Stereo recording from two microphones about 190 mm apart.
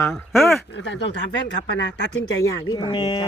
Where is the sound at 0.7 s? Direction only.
70° left (ahead or behind).